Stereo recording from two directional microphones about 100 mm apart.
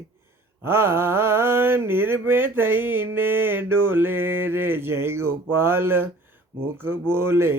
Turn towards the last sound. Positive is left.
turn(degrees=-25)  # may be behind; listen again after turning